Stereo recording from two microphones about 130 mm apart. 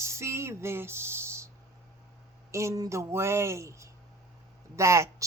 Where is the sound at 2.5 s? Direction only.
25° right (ahead or behind).